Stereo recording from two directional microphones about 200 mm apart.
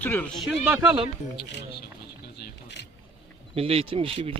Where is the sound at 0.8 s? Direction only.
25° right (ahead or behind).